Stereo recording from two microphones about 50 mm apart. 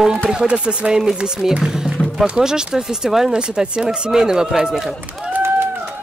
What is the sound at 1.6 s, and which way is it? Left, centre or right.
Music, centre.